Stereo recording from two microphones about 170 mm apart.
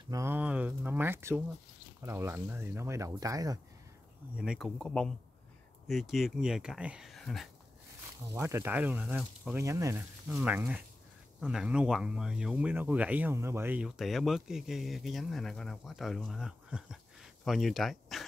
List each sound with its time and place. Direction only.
0.1 s speech: 15° right (ahead or behind)
4.4 s speech: 5° right (ahead or behind)
8.3 s speech: 15° right (ahead or behind); by 18.2 s centre (ahead or behind)